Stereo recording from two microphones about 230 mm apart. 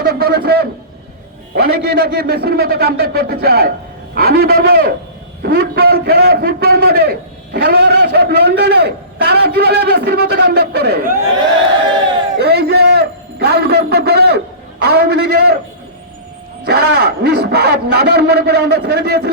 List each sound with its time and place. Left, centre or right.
0.0 s a sound: right
1.6 s a man's voice: right
12.4 s a man's voice: right
16.6 s a man's voice: right